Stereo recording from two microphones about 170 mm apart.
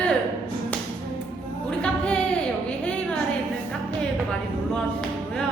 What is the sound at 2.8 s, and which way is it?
Music, 5° left (ahead or behind).